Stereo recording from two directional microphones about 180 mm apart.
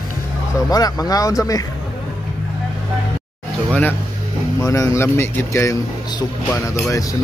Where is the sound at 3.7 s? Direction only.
10° left (ahead or behind).